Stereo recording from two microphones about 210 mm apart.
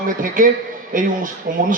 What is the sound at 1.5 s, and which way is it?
Speech, 40° right (ahead or behind).